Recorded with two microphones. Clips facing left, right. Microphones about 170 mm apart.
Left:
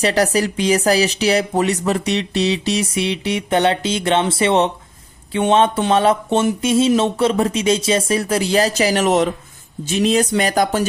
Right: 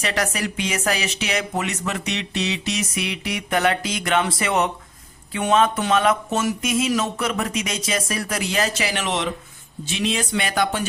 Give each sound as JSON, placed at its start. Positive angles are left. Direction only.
{"t": 0.0, "sound": "speech", "side_deg": 35}